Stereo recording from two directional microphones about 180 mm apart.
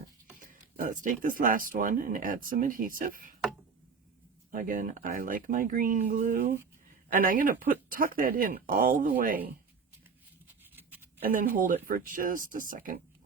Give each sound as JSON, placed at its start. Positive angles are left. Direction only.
{"t": 0.3, "sound": "speech", "side_deg": -50}
{"t": 4.5, "sound": "speech", "side_deg": -50}
{"t": 11.2, "sound": "speech", "side_deg": -50}